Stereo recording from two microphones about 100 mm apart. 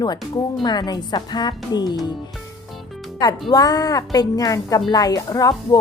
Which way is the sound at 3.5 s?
40° left (ahead or behind).